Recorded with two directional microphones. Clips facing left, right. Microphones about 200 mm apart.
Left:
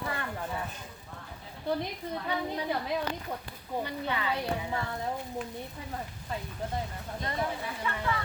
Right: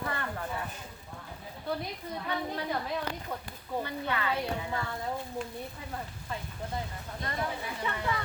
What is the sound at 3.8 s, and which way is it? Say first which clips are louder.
Speech: even; 15° left (ahead or behind).